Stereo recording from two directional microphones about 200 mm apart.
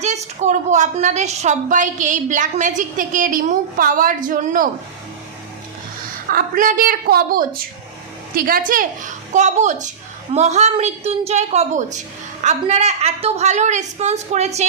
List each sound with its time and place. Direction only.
0.0 s a woman's voice: 35° right (ahead or behind)
6.3 s a woman's voice: 40° right (ahead or behind)